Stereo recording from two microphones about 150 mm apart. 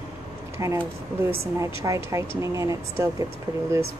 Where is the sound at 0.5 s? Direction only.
20° right (ahead or behind).